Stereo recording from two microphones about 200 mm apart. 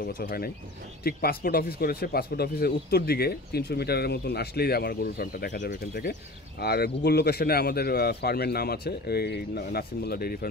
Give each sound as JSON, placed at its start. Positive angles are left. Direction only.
{"t": 0.2, "sound": "speech", "side_deg": 50}